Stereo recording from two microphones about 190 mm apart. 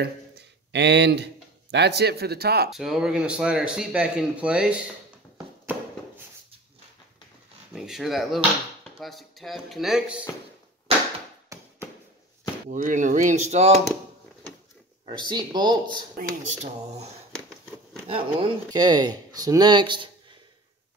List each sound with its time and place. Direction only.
0.7 s a man's voice: 65° right (ahead or behind)
2.7 s speech: centre (ahead or behind)
7.7 s speech: centre (ahead or behind)
10.9 s a sound: 30° right (ahead or behind)
11.4 s chop: 15° right (ahead or behind)
12.6 s speech: 45° right (ahead or behind)
15.0 s speech: 25° right (ahead or behind)
16.2 s speech: 35° right (ahead or behind)